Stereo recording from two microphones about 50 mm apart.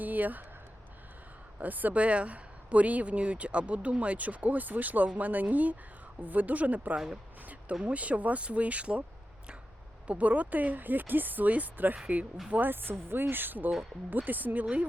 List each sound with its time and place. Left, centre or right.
0.0 s a sound: right
1.5 s speech: right
10.1 s speech: right